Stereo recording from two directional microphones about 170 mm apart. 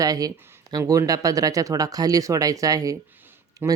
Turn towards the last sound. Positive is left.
turn(degrees=-20)  # may be behind; listen again after turning